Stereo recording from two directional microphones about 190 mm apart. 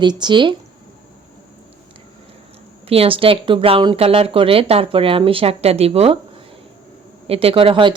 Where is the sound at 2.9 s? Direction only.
30° right (ahead or behind).